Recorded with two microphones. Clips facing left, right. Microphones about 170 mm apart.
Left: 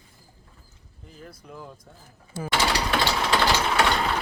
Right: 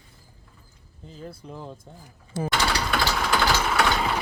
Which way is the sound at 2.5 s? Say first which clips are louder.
Left 2 dB; 5° left (ahead or behind).